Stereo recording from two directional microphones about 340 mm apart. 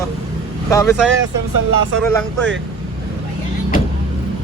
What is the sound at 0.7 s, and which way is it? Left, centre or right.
Speech, centre.